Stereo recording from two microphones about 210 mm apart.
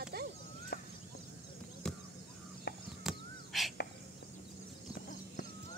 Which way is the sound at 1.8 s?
5° left (ahead or behind).